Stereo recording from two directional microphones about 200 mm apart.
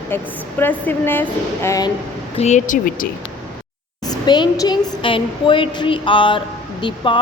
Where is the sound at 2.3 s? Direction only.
35° left (ahead or behind).